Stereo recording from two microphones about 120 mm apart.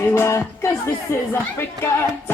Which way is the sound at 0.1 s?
20° left (ahead or behind).